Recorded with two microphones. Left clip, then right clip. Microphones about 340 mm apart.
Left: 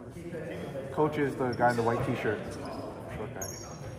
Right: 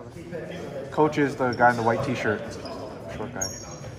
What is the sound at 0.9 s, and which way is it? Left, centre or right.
Speech, right.